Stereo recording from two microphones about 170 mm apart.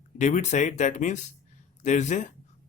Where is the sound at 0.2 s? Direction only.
45° left (ahead or behind).